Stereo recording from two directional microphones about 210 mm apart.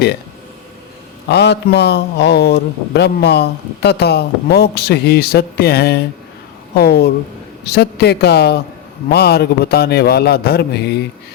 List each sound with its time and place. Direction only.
1.3 s a man's voice: 50° left (ahead or behind)